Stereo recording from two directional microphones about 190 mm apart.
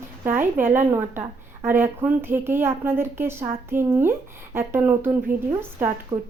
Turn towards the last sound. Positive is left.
turn(degrees=-15)  # may be behind; listen again after turning